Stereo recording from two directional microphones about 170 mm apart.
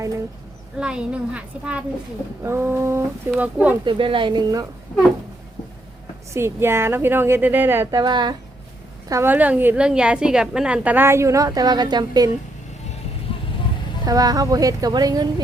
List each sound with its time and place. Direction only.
0.8 s a woman's voice: 5° right (ahead or behind)
3.8 s speech: 30° right (ahead or behind)
6.3 s a woman's voice: 15° right (ahead or behind)
9.0 s a woman's voice: 15° right (ahead or behind)
14.0 s speech: 20° right (ahead or behind)